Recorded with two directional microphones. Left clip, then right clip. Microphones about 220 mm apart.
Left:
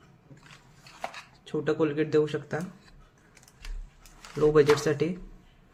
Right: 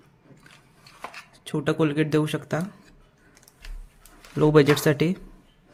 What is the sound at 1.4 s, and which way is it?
A man's voice, 45° right (ahead or behind).